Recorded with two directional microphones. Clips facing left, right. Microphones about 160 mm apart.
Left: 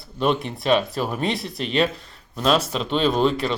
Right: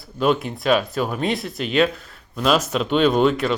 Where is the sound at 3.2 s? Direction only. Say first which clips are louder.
Right 2 dB; 30° left (ahead or behind).